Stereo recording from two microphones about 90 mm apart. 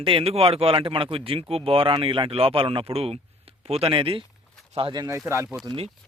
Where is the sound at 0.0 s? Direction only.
85° right.